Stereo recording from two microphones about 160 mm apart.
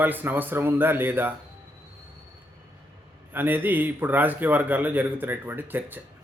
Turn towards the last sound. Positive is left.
turn(degrees=-10)  # may be behind; listen again after turning